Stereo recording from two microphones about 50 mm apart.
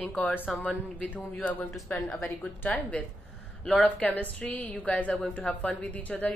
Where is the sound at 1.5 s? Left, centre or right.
Left.